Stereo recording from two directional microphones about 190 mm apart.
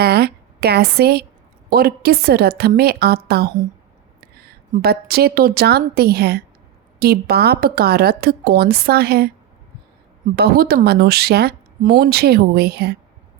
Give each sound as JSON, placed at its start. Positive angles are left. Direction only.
{"t": 0.0, "sound": "a woman's voice", "side_deg": -55}
{"t": 10.3, "sound": "a woman's voice", "side_deg": -55}